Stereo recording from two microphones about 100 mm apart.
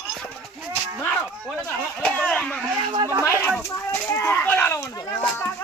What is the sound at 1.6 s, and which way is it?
Speech, 10° left (ahead or behind).